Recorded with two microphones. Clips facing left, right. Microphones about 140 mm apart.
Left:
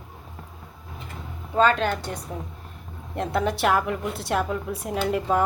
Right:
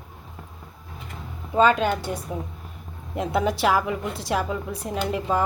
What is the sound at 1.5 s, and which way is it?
A woman's voice, 10° right (ahead or behind).